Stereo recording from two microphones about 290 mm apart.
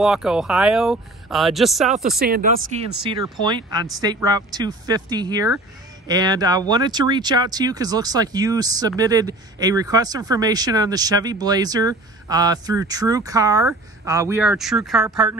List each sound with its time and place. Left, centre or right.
0.0 s speech: centre
2.1 s speech: right
3.0 s speech: centre